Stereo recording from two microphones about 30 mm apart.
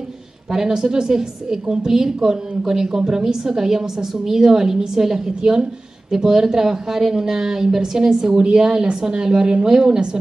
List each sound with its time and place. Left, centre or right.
0.5 s a woman's voice: centre